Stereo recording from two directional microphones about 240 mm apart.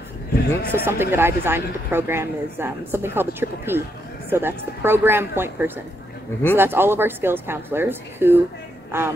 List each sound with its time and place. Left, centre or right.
0.7 s speech: centre